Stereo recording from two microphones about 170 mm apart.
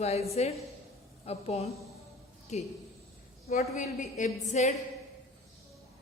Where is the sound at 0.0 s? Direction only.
40° left (ahead or behind).